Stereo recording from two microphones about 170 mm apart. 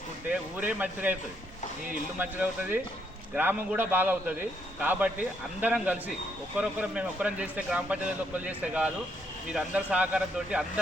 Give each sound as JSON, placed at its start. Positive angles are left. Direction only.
{"t": 0.3, "sound": "speech", "side_deg": -10}
{"t": 2.1, "sound": "speech", "side_deg": -10}